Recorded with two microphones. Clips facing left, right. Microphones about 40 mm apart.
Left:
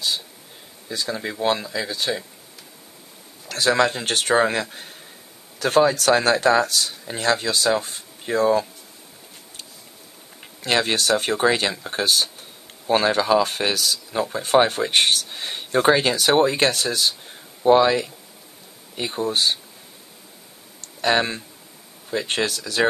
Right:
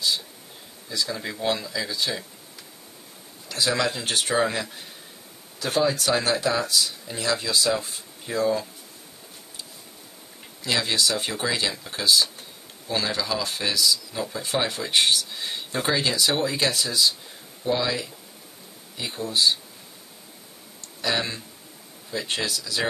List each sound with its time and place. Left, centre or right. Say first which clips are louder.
0.8 s speech: left 2 dB; left
3.4 s speech: left 5 dB; left
10.6 s speech: left 3 dB; left
20.8 s speech: left 6 dB; left